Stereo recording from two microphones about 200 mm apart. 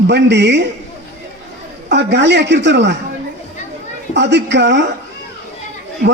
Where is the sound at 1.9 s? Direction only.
60° right (ahead or behind).